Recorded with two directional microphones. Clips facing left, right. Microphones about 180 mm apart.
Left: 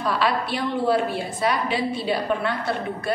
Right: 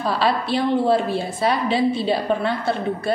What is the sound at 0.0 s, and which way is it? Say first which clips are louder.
A woman's voice: right 2 dB; 30° right (ahead or behind).